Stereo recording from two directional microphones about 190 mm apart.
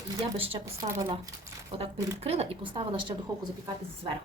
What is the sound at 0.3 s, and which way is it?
Speech, 30° right (ahead or behind).